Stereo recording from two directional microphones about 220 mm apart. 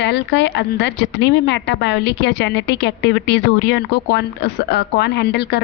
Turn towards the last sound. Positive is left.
turn(degrees=50)  # may be behind; listen again after turning